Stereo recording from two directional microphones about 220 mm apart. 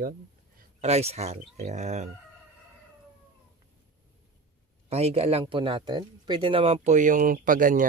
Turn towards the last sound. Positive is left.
turn(degrees=-40)  # may be behind; listen again after turning